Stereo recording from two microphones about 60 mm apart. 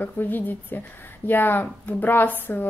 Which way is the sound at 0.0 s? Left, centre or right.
Left.